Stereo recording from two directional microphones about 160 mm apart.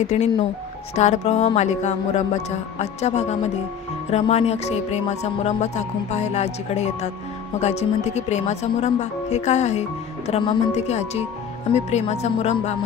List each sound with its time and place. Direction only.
0.0 s music: 45° left (ahead or behind)